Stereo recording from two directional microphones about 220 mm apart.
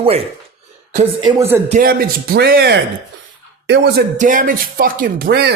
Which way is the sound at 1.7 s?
40° right (ahead or behind).